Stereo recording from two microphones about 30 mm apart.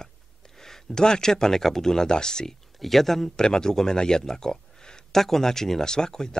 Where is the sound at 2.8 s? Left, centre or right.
Centre.